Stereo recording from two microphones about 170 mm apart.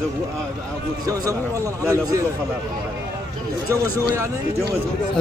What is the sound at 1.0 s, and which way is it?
A man's voice, 20° right (ahead or behind).